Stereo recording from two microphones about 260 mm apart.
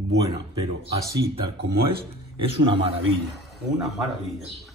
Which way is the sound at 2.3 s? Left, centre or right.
Centre.